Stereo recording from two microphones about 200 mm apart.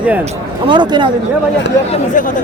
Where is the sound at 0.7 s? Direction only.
25° right (ahead or behind).